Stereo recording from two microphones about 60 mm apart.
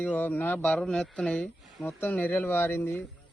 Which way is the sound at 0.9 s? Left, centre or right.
Centre.